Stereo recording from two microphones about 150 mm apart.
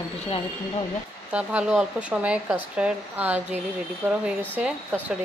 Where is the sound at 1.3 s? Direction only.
5° right (ahead or behind).